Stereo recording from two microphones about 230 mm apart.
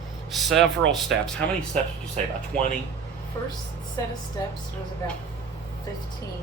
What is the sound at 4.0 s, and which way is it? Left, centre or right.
Speech, centre.